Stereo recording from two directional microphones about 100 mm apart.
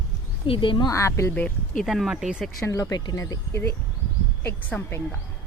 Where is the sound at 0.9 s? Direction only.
30° left (ahead or behind).